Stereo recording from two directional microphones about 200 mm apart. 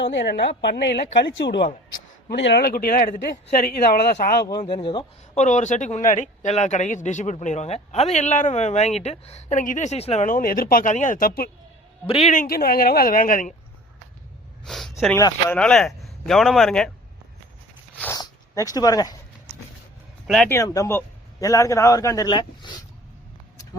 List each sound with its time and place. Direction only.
0.0 s a man's voice: 60° left (ahead or behind)
4.6 s speech: 25° left (ahead or behind)
5.4 s a man's voice: 35° left (ahead or behind)
12.0 s a man's voice: 30° left (ahead or behind)
14.6 s a man's voice: centre (ahead or behind)
18.0 s speech: 15° left (ahead or behind)
20.2 s a man's voice: 5° left (ahead or behind)
20.6 s speech: 15° left (ahead or behind)